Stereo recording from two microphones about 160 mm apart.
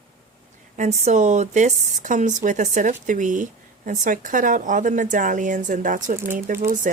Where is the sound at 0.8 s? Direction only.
45° right (ahead or behind).